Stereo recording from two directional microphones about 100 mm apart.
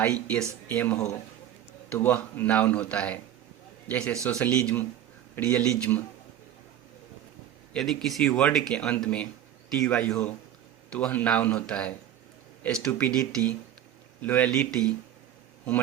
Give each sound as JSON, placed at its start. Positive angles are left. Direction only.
{"t": 0.0, "sound": "a man's voice", "side_deg": 15}
{"t": 7.7, "sound": "a man's voice", "side_deg": 5}